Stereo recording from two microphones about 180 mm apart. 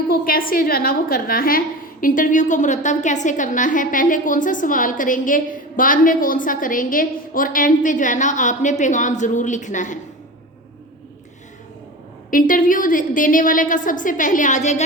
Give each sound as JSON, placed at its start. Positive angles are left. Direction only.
{"t": 0.1, "sound": "a woman's voice", "side_deg": 55}
{"t": 12.3, "sound": "a woman's voice", "side_deg": 50}